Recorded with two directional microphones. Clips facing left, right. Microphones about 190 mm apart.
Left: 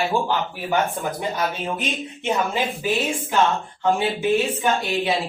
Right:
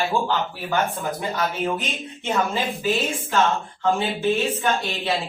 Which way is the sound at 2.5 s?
15° left (ahead or behind).